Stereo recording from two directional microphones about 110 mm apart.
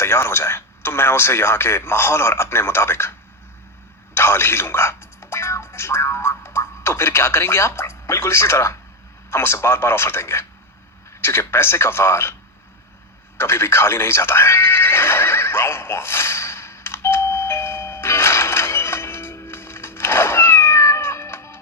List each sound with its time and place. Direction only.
0.0 s speech: 25° left (ahead or behind)
4.1 s music: 20° left (ahead or behind)
9.3 s speech: 20° left (ahead or behind)
13.3 s neigh: 20° left (ahead or behind)